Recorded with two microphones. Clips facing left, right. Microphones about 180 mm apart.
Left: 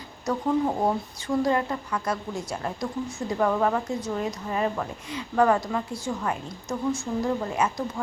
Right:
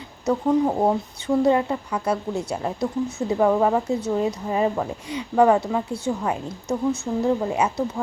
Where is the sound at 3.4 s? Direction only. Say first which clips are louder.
Right 4 dB; 20° right (ahead or behind).